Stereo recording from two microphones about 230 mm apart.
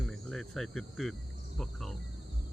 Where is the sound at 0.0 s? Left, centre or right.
Centre.